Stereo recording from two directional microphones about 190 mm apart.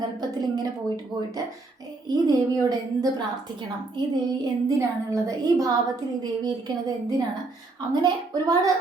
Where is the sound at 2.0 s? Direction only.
20° right (ahead or behind).